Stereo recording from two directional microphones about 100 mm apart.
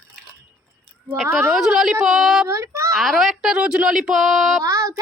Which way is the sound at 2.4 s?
30° right (ahead or behind).